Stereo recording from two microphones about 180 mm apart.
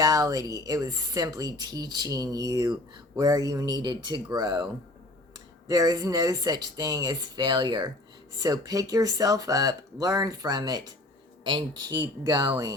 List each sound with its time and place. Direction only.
0.0 s speech: 20° right (ahead or behind)